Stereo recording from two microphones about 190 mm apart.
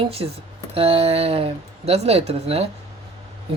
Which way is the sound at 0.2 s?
25° right (ahead or behind).